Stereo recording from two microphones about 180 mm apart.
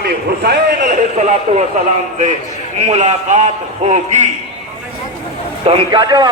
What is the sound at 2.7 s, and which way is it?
A man's voice, 35° right (ahead or behind).